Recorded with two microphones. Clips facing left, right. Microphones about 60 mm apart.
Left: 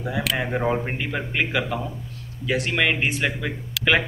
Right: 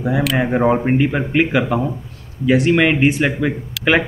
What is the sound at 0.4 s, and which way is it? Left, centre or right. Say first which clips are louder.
A man's voice: right 9 dB; right.